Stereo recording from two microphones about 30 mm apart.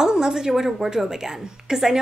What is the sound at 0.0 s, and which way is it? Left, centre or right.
A woman's voice, right.